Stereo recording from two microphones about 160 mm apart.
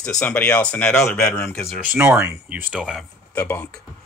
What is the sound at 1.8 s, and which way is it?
Speech, 10° right (ahead or behind).